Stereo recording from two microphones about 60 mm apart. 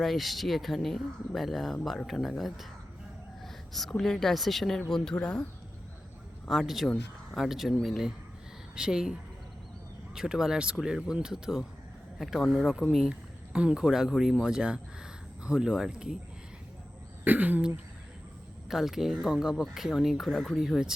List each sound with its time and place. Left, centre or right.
0.0 s speech: centre
3.4 s a sound: centre
3.9 s speech: centre
6.5 s speech: centre
8.7 s speech: centre
10.2 s speech: centre
13.5 s speech: centre
17.2 s speech: right
18.7 s speech: centre